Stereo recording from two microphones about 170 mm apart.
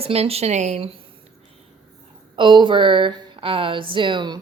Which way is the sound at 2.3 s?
30° right (ahead or behind).